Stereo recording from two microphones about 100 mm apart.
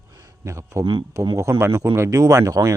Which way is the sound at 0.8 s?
55° right (ahead or behind).